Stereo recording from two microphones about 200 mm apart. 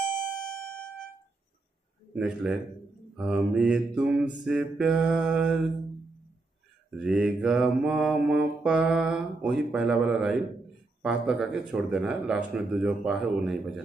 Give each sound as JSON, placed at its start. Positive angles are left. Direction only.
{"t": 0.6, "sound": "music", "side_deg": 5}
{"t": 2.1, "sound": "mantra", "side_deg": -5}
{"t": 6.9, "sound": "mantra", "side_deg": -5}